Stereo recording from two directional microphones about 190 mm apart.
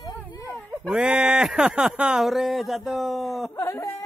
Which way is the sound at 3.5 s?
15° left (ahead or behind).